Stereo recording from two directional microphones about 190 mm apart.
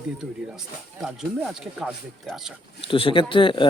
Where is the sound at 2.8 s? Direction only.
25° left (ahead or behind).